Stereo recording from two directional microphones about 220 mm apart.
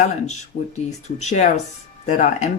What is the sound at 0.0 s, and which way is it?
Speech, 30° left (ahead or behind).